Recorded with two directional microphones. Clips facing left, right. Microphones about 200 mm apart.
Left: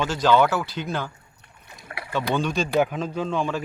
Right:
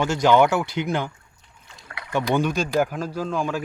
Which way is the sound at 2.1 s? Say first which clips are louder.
Right 2 dB; 10° right (ahead or behind).